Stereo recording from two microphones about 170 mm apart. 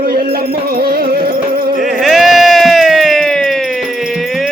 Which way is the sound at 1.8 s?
Centre (ahead or behind).